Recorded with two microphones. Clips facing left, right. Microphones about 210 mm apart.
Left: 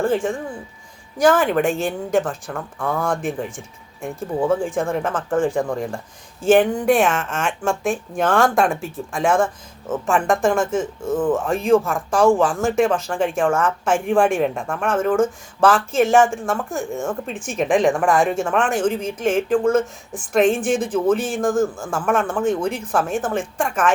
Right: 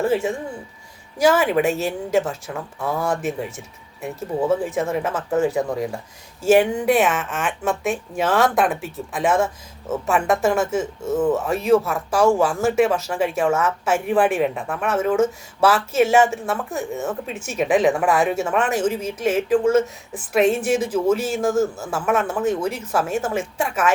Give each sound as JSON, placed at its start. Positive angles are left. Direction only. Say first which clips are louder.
{"t": 1.2, "sound": "speech", "louder": "left 1 dB", "side_deg": -5}
{"t": 11.1, "sound": "speech", "louder": "even", "side_deg": -25}
{"t": 11.3, "sound": "speech", "louder": "left 1 dB", "side_deg": -5}
{"t": 21.2, "sound": "speech", "louder": "even", "side_deg": 50}
{"t": 21.8, "sound": "speech", "louder": "left 1 dB", "side_deg": -5}